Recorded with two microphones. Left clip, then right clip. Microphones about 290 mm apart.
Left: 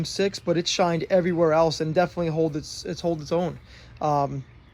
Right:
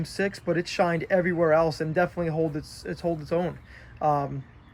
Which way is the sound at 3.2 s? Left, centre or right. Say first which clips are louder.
Left 2 dB; centre.